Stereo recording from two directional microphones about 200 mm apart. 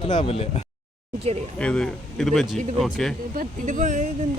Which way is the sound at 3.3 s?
40° right (ahead or behind).